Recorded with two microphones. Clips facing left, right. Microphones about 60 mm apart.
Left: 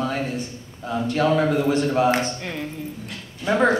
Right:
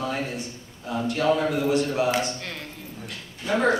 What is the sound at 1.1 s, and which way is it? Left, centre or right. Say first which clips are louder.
A woman's voice: left 3 dB; left.